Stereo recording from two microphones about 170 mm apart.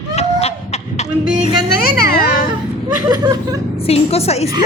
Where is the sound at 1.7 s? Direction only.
65° left (ahead or behind).